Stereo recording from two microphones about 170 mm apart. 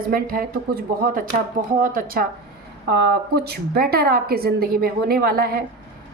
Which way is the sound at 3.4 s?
65° right (ahead or behind).